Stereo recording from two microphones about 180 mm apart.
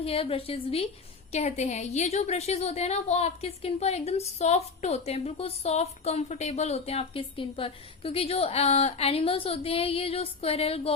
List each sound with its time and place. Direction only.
0.0 s a woman's voice: 30° left (ahead or behind)